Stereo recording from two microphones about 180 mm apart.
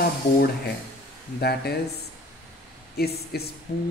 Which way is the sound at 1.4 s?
60° left (ahead or behind).